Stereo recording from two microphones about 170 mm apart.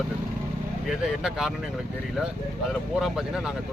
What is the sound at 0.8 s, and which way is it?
Speech, 5° right (ahead or behind).